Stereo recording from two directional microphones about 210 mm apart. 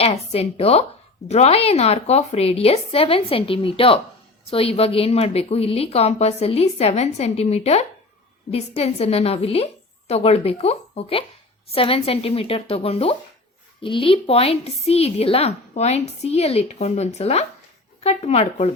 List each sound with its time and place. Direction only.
0.0 s a woman's voice: 30° left (ahead or behind)